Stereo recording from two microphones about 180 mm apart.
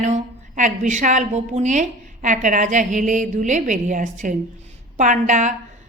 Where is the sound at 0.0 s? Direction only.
40° right (ahead or behind).